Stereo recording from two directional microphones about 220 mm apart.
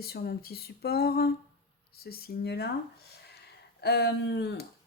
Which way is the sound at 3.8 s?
50° left (ahead or behind).